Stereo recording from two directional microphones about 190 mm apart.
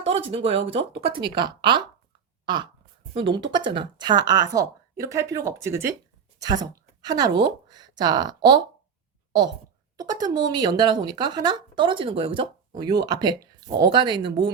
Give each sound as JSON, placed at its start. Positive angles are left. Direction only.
{"t": 0.0, "sound": "speech", "side_deg": -30}
{"t": 3.2, "sound": "speech", "side_deg": -25}
{"t": 10.0, "sound": "speech", "side_deg": -20}